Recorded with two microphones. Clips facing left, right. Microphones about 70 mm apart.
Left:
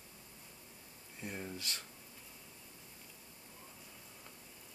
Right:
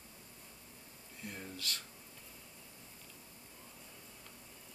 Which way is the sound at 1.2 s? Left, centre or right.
Left.